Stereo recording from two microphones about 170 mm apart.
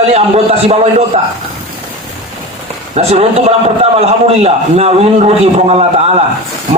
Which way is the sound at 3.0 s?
40° right (ahead or behind).